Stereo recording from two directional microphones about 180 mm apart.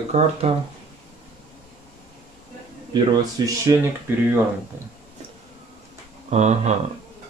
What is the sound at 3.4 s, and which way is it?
Speech, 20° right (ahead or behind).